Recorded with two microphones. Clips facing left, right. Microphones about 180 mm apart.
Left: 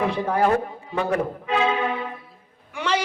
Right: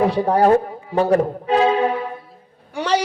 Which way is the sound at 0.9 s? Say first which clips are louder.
Right 7 dB; 35° right (ahead or behind).